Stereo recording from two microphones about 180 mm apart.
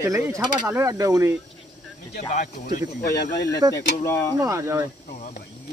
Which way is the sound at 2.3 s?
45° left (ahead or behind).